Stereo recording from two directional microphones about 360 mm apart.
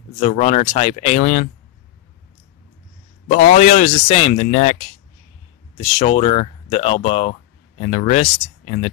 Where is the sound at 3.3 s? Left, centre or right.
Left.